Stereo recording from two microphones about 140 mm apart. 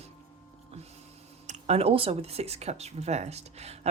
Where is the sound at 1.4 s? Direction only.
45° right (ahead or behind).